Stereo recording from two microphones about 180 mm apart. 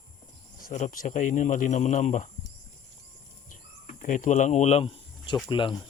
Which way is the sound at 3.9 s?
45° left (ahead or behind).